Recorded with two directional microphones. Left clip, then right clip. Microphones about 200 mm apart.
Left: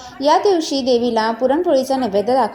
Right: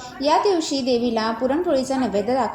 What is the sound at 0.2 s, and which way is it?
A woman's voice, 5° left (ahead or behind).